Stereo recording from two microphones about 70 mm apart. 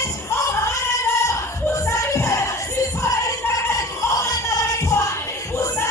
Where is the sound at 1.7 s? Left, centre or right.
Left.